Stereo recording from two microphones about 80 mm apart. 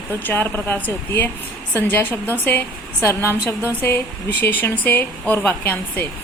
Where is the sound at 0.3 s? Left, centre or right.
Left.